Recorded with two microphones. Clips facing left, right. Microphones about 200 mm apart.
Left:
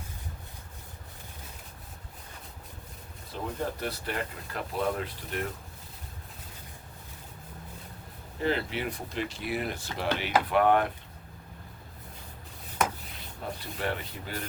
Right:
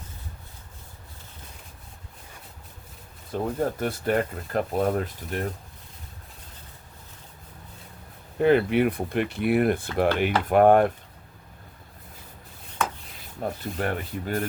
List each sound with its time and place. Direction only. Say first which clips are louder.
3.3 s speech: right 7 dB; 50° right (ahead or behind)
8.4 s speech: right 10 dB; 55° right (ahead or behind)
13.4 s speech: right 5 dB; 45° right (ahead or behind)